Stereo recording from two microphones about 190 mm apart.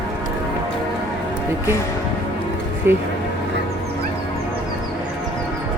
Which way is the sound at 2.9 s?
10° right (ahead or behind).